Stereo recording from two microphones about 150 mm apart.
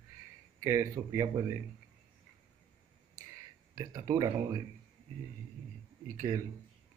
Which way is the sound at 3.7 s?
20° right (ahead or behind).